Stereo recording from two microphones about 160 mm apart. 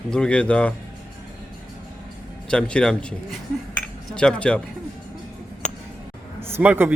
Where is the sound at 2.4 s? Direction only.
5° left (ahead or behind).